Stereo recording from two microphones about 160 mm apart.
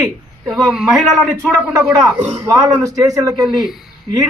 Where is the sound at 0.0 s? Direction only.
Centre (ahead or behind).